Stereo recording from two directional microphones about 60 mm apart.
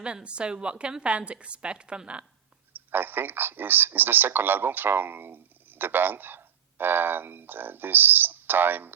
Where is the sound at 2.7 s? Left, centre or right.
Right.